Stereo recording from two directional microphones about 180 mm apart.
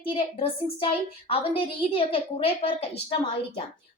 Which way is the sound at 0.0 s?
30° left (ahead or behind).